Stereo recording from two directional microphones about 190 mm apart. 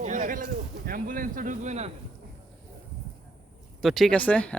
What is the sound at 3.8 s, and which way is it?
Speech, centre (ahead or behind).